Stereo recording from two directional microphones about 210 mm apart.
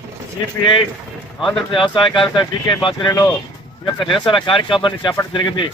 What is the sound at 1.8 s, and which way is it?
Speech, 20° left (ahead or behind).